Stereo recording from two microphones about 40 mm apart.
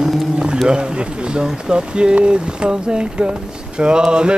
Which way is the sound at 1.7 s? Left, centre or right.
Right.